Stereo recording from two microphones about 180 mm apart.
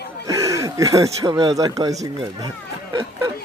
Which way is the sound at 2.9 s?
20° right (ahead or behind).